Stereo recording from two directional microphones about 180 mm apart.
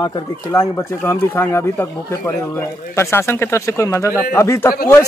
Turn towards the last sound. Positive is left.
turn(degrees=15)  # may be behind; listen again after turning